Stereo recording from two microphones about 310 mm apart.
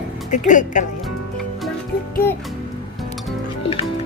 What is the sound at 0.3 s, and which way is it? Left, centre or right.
Speech, left.